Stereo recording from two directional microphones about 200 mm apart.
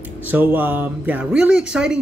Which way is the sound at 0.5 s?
10° right (ahead or behind).